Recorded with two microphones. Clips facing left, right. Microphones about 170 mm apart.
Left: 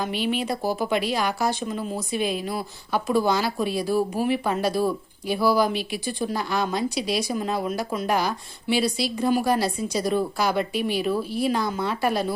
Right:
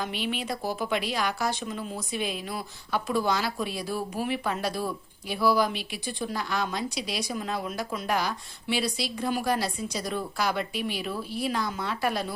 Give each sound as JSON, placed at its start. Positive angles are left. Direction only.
{"t": 0.0, "sound": "speech", "side_deg": 0}
{"t": 0.4, "sound": "speech", "side_deg": 30}
{"t": 0.9, "sound": "speech", "side_deg": 0}